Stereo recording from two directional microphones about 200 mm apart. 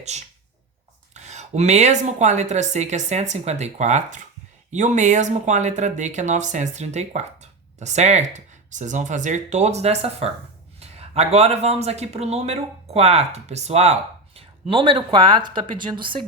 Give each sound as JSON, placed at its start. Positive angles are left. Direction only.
{"t": 1.1, "sound": "speech", "side_deg": -35}